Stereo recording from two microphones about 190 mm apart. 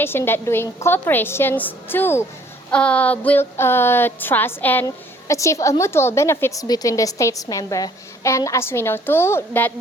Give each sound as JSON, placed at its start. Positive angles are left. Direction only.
{"t": 0.0, "sound": "a woman's voice", "side_deg": 10}